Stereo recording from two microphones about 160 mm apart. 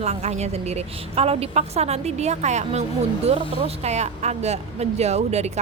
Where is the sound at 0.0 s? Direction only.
45° right (ahead or behind).